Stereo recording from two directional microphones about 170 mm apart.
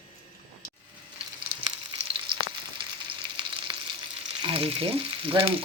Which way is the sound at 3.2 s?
25° right (ahead or behind).